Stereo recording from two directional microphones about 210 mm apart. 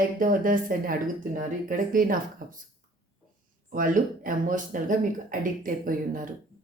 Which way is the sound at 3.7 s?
40° right (ahead or behind).